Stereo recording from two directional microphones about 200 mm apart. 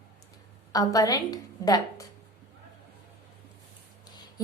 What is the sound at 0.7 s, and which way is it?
A woman's voice, 15° left (ahead or behind).